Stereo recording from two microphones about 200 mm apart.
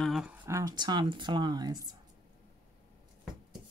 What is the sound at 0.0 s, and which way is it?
Speech, 5° right (ahead or behind).